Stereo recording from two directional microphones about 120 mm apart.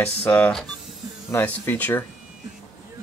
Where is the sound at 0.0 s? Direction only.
15° left (ahead or behind).